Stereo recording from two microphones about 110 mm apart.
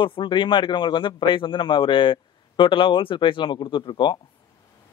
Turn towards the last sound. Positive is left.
turn(degrees=45)  # may be behind; listen again after turning